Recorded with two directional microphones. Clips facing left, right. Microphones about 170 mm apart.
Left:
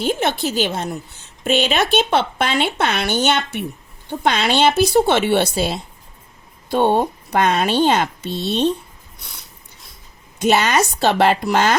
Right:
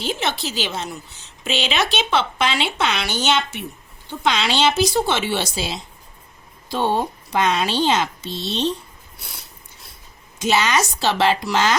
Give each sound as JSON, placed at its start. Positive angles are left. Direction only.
{"t": 0.0, "sound": "a woman's voice", "side_deg": 50}
{"t": 10.4, "sound": "a woman's voice", "side_deg": 55}